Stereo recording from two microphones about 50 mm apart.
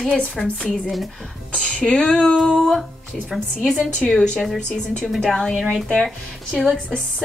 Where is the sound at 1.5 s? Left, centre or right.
Left.